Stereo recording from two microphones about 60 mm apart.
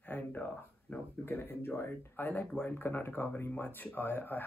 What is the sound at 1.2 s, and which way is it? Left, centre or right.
Speech, left.